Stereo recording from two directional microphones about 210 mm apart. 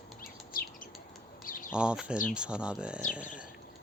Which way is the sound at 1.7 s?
5° right (ahead or behind).